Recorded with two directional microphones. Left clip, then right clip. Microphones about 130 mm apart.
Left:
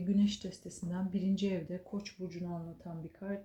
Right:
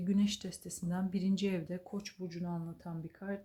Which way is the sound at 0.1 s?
50° right (ahead or behind).